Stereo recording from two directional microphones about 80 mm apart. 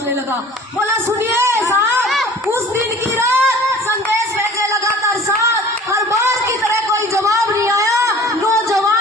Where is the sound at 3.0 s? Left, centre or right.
Right.